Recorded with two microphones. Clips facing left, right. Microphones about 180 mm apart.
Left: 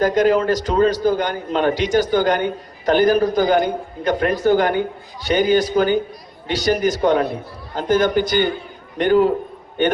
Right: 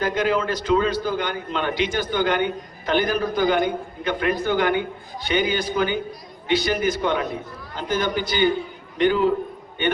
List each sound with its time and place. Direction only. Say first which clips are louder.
0.0 s a man's voice: left 6 dB; 40° left (ahead or behind)